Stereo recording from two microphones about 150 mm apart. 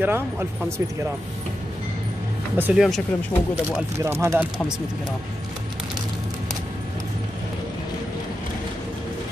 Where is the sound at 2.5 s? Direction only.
15° right (ahead or behind).